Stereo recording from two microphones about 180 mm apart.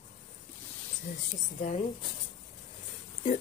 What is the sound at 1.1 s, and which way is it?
Speech, 45° left (ahead or behind).